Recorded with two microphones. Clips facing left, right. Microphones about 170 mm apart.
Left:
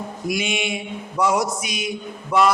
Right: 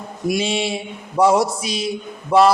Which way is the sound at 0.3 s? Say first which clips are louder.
Right 4 dB; 30° right (ahead or behind).